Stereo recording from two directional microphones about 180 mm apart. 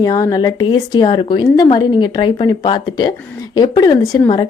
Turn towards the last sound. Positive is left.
turn(degrees=20)  # may be behind; listen again after turning